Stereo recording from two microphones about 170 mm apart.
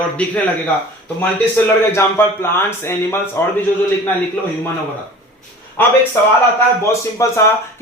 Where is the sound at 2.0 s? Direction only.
15° left (ahead or behind).